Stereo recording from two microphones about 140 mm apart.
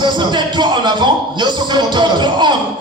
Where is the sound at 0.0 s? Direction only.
35° right (ahead or behind).